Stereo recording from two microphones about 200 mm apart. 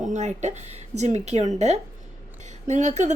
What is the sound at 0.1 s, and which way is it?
A woman's voice, 35° right (ahead or behind).